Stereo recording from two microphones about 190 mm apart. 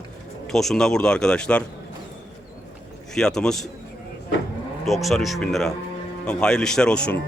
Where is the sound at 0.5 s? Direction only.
Centre (ahead or behind).